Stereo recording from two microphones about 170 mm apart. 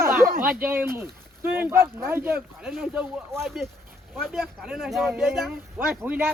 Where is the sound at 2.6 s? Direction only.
Centre (ahead or behind).